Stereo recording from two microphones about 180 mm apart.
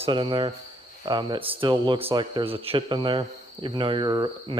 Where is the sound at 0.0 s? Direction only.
25° right (ahead or behind).